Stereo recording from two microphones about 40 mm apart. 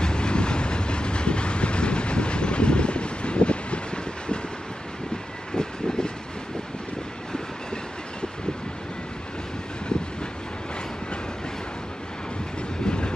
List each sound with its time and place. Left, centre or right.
0.0 s train: left
5.5 s vehicle: centre
7.3 s train: left
12.8 s train: left